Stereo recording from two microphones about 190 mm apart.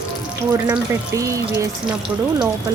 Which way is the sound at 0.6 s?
15° right (ahead or behind).